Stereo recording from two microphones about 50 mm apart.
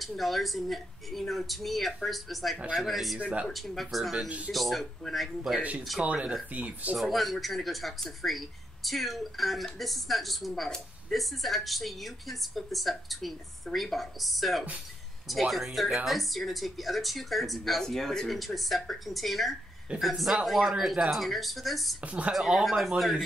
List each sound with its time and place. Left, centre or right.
0.2 s speech: centre
3.2 s speech: right
3.4 s speech: centre
5.6 s speech: right
7.0 s speech: centre
22.0 s speech: right
22.3 s speech: centre